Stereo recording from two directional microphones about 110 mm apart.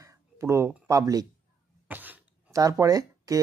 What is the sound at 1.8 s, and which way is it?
Cough, 15° right (ahead or behind).